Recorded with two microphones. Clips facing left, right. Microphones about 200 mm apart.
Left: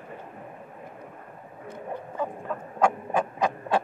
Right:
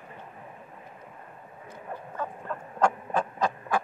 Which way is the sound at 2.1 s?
10° left (ahead or behind).